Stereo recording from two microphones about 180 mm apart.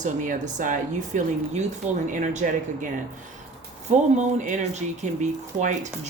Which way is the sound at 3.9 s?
40° right (ahead or behind).